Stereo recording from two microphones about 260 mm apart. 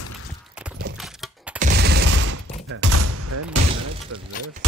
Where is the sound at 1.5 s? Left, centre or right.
Right.